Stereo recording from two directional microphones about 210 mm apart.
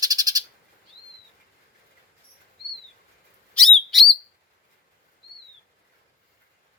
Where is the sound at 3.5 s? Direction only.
Centre (ahead or behind).